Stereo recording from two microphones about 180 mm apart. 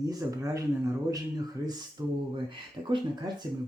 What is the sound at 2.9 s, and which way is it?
Speech, 30° right (ahead or behind).